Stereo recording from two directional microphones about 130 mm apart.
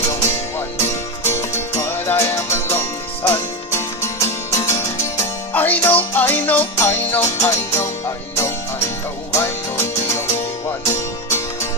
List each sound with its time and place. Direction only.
0.0 s music: 20° left (ahead or behind)
1.8 s music: 20° left (ahead or behind)